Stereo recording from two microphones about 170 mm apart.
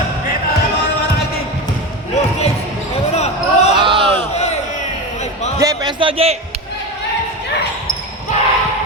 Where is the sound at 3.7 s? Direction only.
30° right (ahead or behind).